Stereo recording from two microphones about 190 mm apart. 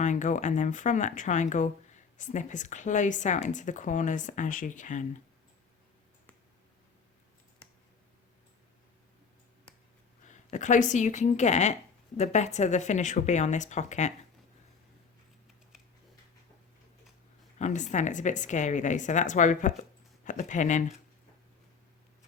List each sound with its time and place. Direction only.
0.0 s speech: 40° left (ahead or behind)
10.2 s speech: 40° left (ahead or behind)
17.6 s speech: 40° left (ahead or behind)